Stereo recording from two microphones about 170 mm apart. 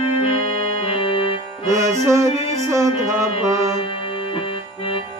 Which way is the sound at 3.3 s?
30° left (ahead or behind).